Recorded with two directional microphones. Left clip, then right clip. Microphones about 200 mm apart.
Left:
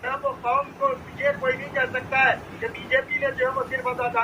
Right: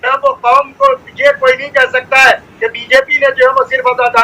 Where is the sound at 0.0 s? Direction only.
45° right (ahead or behind).